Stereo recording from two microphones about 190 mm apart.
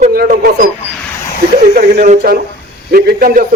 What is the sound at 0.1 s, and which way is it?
Speech, 50° right (ahead or behind).